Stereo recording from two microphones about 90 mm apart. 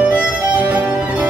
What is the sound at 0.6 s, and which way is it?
Music, 15° right (ahead or behind).